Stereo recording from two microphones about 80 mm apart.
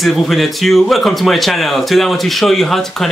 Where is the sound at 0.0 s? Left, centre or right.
Centre.